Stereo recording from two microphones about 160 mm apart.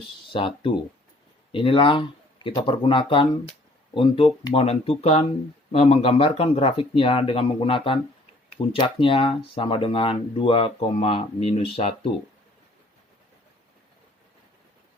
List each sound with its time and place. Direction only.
0.3 s speech: 35° left (ahead or behind)